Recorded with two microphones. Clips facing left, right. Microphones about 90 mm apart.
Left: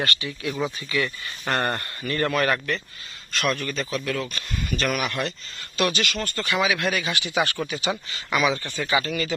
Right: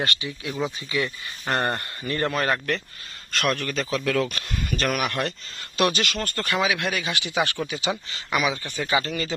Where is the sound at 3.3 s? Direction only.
60° right (ahead or behind).